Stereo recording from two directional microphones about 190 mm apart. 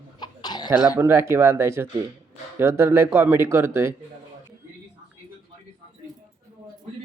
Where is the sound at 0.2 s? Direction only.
20° left (ahead or behind).